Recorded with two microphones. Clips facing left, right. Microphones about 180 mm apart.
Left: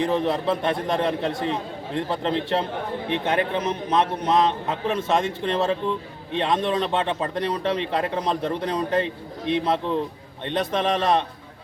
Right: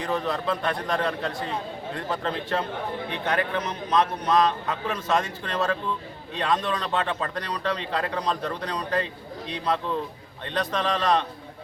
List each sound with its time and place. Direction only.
0.0 s speech: 25° left (ahead or behind)